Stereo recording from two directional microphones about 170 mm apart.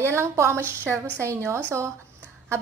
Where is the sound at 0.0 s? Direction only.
15° right (ahead or behind).